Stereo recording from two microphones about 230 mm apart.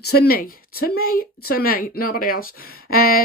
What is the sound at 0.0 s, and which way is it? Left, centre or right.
Speech, left.